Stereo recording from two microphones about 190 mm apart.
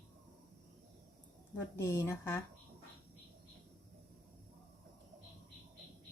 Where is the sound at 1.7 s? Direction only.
15° left (ahead or behind).